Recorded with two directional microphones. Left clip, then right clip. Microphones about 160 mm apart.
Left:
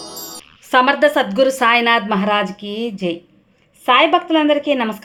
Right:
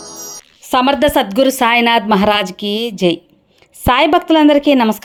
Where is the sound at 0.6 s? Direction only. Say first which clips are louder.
Even; 25° right (ahead or behind).